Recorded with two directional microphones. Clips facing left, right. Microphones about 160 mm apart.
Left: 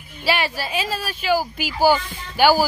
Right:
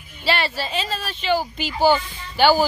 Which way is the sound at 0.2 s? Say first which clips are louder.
Left 1 dB; 10° left (ahead or behind).